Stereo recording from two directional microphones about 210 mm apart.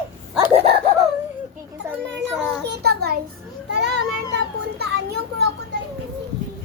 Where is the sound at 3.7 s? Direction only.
55° right (ahead or behind).